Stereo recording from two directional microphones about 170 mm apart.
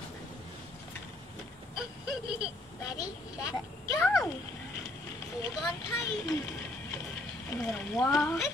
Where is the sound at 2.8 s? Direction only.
20° left (ahead or behind).